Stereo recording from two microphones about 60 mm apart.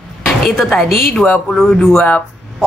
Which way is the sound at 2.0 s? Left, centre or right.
Left.